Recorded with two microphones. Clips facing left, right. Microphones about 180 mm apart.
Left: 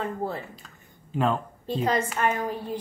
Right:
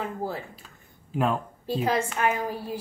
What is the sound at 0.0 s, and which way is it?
A woman's voice, 5° right (ahead or behind).